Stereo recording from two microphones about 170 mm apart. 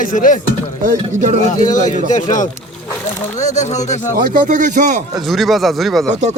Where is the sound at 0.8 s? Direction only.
45° right (ahead or behind).